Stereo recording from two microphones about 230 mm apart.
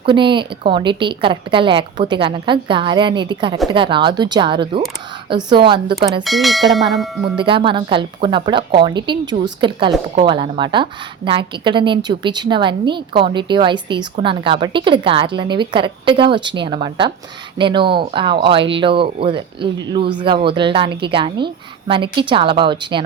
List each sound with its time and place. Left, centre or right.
0.0 s a woman's voice: right
6.2 s speech: centre
7.3 s a woman's voice: right